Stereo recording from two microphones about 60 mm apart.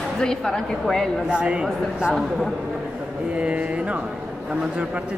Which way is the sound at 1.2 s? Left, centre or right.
Centre.